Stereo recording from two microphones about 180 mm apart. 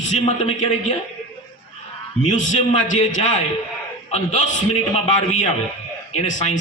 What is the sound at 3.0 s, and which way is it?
Speech, 40° left (ahead or behind).